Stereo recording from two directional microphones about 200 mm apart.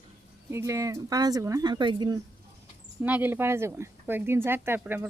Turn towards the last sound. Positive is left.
turn(degrees=-10)  # may be behind; listen again after turning